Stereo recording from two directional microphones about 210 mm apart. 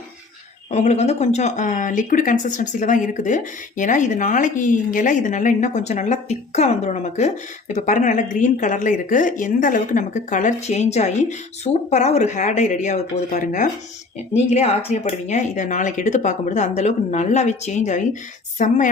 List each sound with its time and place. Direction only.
0.7 s speech: 30° left (ahead or behind)